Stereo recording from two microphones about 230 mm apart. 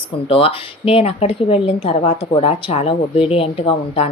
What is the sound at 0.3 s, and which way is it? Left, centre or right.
A woman's voice, left.